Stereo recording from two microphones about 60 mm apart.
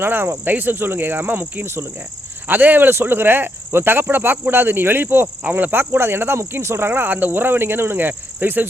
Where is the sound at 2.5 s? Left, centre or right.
Right.